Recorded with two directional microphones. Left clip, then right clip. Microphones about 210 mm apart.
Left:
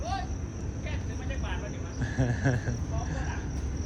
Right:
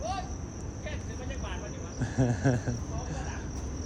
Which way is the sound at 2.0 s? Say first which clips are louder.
Right 2 dB; 30° right (ahead or behind).